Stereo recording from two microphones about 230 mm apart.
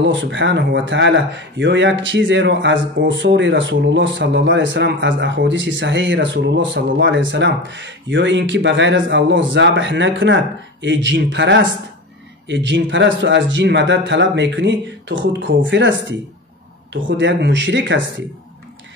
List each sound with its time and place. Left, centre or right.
0.0 s speech: right